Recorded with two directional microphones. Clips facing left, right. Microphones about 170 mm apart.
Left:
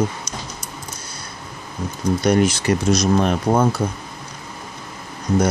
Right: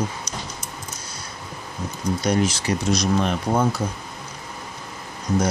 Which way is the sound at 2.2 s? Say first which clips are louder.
Left 5 dB; 60° left (ahead or behind).